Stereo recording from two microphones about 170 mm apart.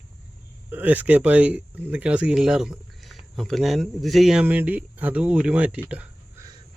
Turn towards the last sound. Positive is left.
turn(degrees=-10)  # may be behind; listen again after turning